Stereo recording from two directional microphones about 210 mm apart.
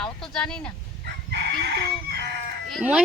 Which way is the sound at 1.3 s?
50° right (ahead or behind).